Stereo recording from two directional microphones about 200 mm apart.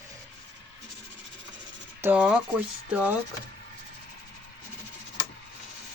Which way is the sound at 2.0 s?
10° right (ahead or behind).